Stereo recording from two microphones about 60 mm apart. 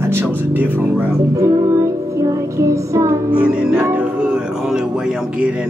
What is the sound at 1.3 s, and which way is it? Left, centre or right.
Music, right.